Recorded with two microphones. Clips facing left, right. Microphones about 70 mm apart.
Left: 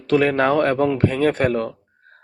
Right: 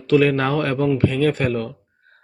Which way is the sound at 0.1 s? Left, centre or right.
Left.